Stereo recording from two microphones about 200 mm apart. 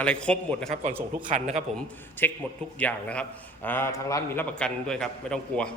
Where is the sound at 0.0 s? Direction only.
5° left (ahead or behind).